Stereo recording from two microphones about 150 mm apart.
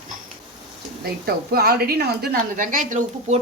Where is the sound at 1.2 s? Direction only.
90° right.